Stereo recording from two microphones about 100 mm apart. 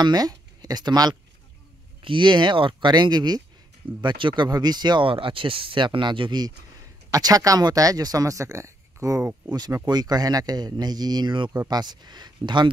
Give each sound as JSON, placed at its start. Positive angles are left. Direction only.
{"t": 0.0, "sound": "speech", "side_deg": -40}
{"t": 2.0, "sound": "speech", "side_deg": -55}
{"t": 7.1, "sound": "speech", "side_deg": -40}